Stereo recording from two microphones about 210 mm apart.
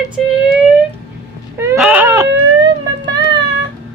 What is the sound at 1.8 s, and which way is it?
Baby cry, 5° right (ahead or behind).